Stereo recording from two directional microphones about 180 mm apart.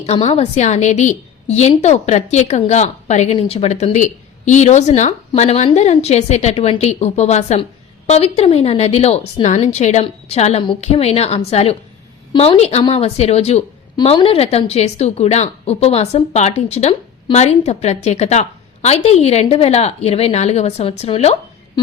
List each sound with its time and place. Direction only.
0.0 s a woman's voice: 30° left (ahead or behind)